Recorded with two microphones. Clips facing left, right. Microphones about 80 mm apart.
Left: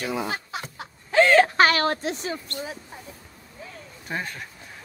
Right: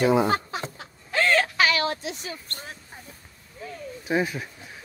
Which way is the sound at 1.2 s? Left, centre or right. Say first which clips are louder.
Left 5 dB; left.